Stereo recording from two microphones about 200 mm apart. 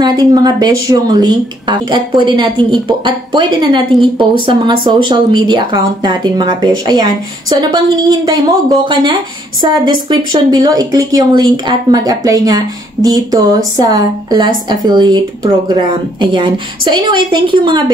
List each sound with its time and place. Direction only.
0.0 s speech: 20° right (ahead or behind)